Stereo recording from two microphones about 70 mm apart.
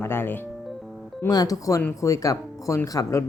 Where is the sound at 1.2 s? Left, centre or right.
Left.